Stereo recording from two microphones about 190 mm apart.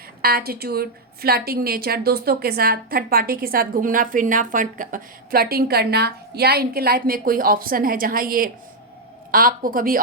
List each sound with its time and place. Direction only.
0.2 s a woman's voice: 55° right (ahead or behind)